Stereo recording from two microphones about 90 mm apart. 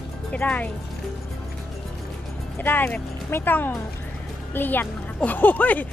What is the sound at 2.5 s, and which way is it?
A woman's voice, 20° left (ahead or behind).